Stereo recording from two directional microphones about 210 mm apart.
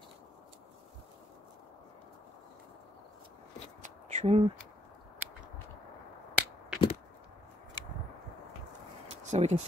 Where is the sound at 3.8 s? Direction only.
35° right (ahead or behind).